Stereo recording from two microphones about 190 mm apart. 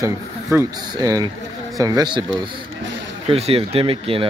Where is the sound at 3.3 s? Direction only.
30° right (ahead or behind).